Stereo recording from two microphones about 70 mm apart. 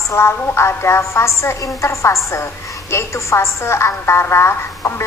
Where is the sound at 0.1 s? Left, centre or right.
Left.